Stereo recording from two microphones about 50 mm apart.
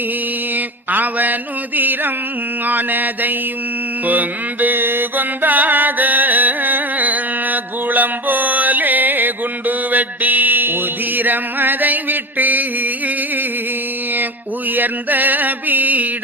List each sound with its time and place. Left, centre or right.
0.5 s mantra: right
14.8 s mantra: right